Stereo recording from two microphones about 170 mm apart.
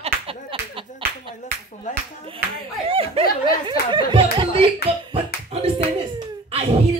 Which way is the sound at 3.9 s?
30° right (ahead or behind).